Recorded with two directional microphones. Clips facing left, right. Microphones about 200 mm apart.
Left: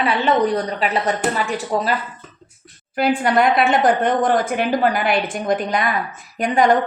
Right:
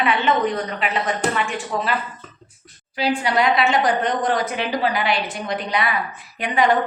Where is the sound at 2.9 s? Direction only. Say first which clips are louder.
Left 4 dB; 55° left (ahead or behind).